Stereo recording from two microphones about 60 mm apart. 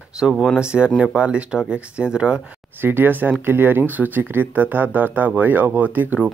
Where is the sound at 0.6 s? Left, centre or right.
Centre.